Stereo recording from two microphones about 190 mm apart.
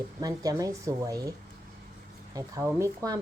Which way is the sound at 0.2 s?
20° right (ahead or behind).